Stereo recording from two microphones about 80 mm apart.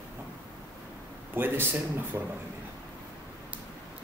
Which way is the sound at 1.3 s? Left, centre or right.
Right.